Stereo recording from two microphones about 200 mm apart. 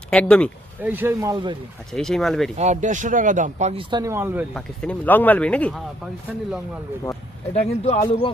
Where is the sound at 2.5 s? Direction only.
35° right (ahead or behind).